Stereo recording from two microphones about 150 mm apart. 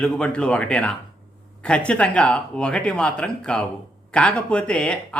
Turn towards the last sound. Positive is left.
turn(degrees=5)  # may be behind; listen again after turning